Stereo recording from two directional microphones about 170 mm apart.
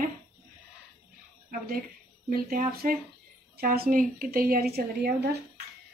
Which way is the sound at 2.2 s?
55° right (ahead or behind).